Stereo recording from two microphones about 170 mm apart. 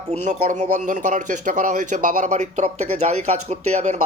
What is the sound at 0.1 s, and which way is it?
Speech, 45° right (ahead or behind).